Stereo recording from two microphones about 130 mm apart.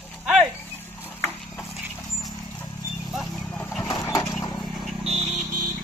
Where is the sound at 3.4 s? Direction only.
15° left (ahead or behind).